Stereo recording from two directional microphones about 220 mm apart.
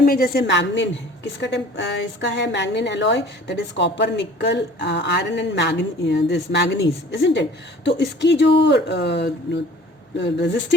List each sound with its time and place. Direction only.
0.0 s a woman's voice: 40° left (ahead or behind)